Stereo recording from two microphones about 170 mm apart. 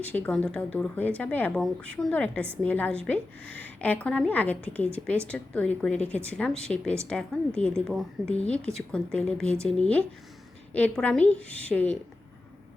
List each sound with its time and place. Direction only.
0.0 s speech: 10° left (ahead or behind)